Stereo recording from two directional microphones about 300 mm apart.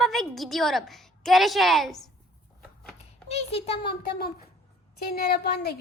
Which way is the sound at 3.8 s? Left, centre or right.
Left.